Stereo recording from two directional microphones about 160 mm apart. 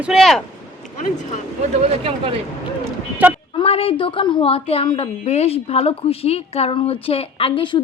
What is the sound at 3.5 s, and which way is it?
A woman's voice, 35° left (ahead or behind).